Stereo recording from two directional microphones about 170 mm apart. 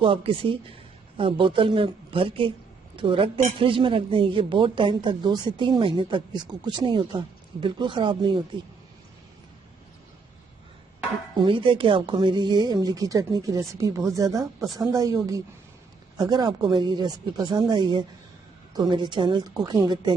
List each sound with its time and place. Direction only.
0.0 s a woman's voice: 30° right (ahead or behind)
11.3 s a woman's voice: 30° right (ahead or behind)